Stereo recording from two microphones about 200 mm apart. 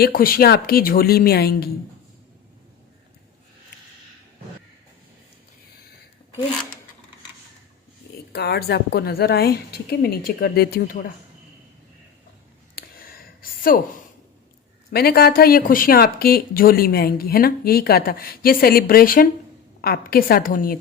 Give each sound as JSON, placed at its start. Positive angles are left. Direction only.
{"t": 0.0, "sound": "speech", "side_deg": 45}
{"t": 8.3, "sound": "speech", "side_deg": 55}
{"t": 12.7, "sound": "a sound", "side_deg": 45}
{"t": 14.9, "sound": "speech", "side_deg": 50}